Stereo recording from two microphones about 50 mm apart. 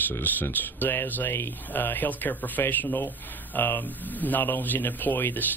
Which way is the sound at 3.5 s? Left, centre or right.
Left.